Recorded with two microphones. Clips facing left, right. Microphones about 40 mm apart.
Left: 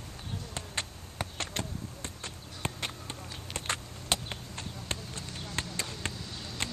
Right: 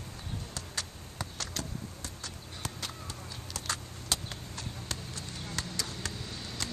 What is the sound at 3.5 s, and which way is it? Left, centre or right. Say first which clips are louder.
Basketball bounce: left 2 dB; left.